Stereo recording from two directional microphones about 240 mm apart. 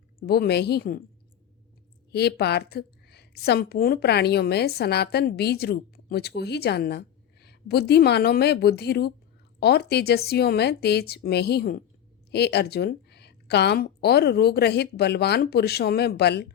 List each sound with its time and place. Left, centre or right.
0.2 s a woman's voice: left
2.1 s a woman's voice: left